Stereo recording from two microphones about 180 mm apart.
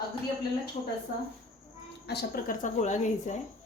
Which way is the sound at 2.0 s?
65° left (ahead or behind).